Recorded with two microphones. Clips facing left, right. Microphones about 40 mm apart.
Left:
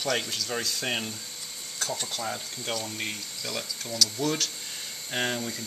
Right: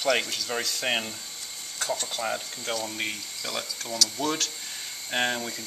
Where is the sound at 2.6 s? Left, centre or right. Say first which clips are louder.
Even; centre.